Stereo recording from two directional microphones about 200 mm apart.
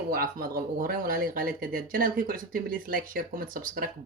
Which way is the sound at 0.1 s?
45° right (ahead or behind).